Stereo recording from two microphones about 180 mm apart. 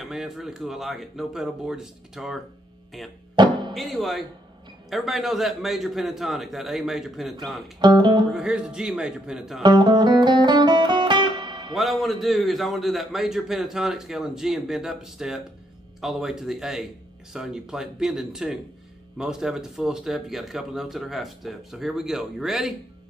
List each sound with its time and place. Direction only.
0.0 s a man's voice: centre (ahead or behind)
3.4 s speech: 25° right (ahead or behind)
3.7 s a man's voice: centre (ahead or behind)
7.8 s speech: 25° right (ahead or behind)
8.3 s a man's voice: 5° right (ahead or behind)
9.6 s music: 25° right (ahead or behind)
11.7 s a man's voice: centre (ahead or behind)